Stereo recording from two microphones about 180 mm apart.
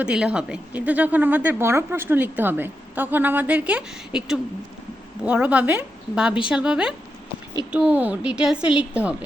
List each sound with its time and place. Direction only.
0.0 s a woman's voice: 5° right (ahead or behind)